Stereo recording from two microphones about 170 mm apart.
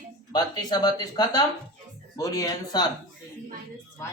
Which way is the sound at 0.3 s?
25° left (ahead or behind).